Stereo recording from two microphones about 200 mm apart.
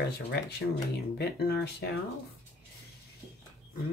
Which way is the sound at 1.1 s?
55° left (ahead or behind).